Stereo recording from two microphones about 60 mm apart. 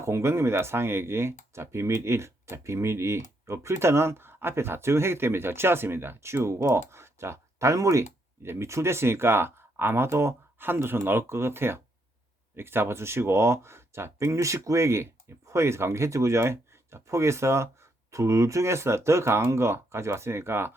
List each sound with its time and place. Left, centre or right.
0.0 s speech: right
8.4 s speech: right